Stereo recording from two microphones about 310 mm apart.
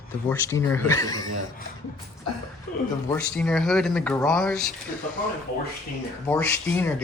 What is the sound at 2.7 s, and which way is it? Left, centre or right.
Speech, left.